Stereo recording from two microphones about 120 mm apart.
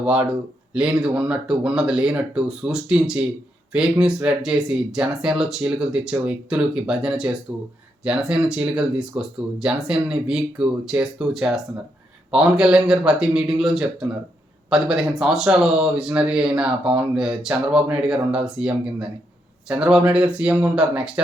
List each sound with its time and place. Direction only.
0.0 s a man's voice: 10° right (ahead or behind)